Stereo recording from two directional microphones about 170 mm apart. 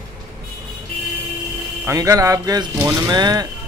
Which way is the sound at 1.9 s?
20° right (ahead or behind).